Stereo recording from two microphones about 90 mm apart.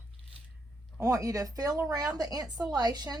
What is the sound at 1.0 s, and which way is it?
A woman's voice, 40° right (ahead or behind).